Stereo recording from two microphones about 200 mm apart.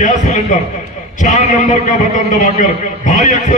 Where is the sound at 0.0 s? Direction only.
40° left (ahead or behind).